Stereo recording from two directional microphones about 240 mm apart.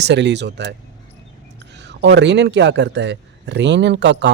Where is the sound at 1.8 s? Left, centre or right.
Right.